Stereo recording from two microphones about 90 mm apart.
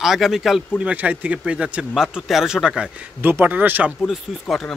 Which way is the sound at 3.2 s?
20° right (ahead or behind).